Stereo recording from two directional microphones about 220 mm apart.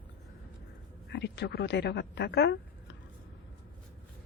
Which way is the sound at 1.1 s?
50° left (ahead or behind).